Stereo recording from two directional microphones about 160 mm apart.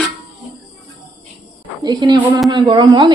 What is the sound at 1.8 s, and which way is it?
A woman's voice, 25° right (ahead or behind).